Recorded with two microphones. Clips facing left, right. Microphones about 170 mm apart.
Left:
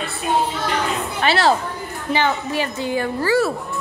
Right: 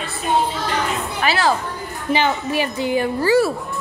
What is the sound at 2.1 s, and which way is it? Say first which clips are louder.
A woman's voice: right 1 dB; 15° right (ahead or behind).